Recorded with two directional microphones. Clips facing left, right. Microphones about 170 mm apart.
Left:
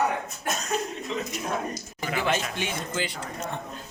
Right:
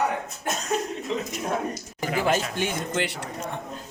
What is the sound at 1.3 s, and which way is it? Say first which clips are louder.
Speech: right 2 dB; 45° right (ahead or behind).